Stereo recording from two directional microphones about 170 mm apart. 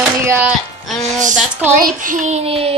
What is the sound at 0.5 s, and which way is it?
Speech, centre (ahead or behind).